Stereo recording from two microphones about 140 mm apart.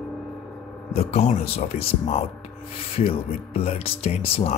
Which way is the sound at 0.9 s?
50° left (ahead or behind).